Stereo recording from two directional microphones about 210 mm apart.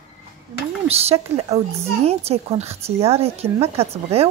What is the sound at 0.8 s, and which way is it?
A woman's voice, 30° right (ahead or behind).